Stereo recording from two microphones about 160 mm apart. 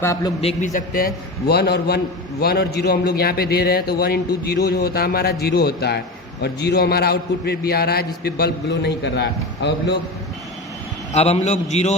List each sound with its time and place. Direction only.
0.0 s a man's voice: 20° left (ahead or behind)
0.4 s a man's voice: 50° left (ahead or behind); by 2.0 s 90° left
2.4 s a man's voice: 80° left
11.1 s a man's voice: 40° left (ahead or behind)